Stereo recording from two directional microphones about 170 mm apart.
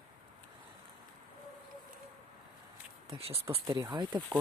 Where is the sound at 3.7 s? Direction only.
20° right (ahead or behind).